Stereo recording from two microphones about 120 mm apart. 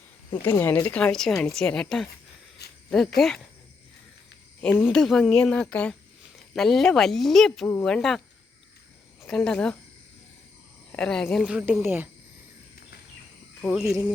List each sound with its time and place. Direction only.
0.4 s a woman's voice: 15° left (ahead or behind)
4.8 s a woman's voice: centre (ahead or behind)
9.2 s speech: 5° left (ahead or behind)
10.9 s a woman's voice: 5° left (ahead or behind)
11.4 s a woman's voice: 10° right (ahead or behind)
13.6 s a woman's voice: 5° right (ahead or behind)